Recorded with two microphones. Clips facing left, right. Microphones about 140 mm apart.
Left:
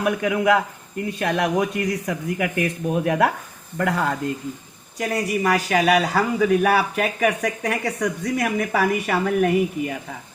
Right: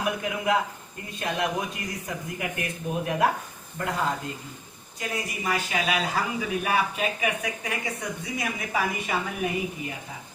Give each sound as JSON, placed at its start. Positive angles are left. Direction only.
{"t": 0.0, "sound": "speech", "side_deg": 60}